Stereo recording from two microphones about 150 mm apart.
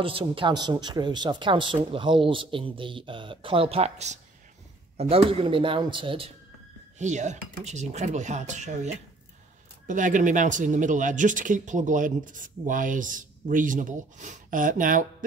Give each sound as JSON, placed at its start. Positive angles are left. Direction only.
{"t": 0.0, "sound": "speech", "side_deg": -35}
{"t": 7.0, "sound": "speech", "side_deg": -55}